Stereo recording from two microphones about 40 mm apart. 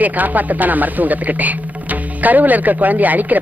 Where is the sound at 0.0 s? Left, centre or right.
Right.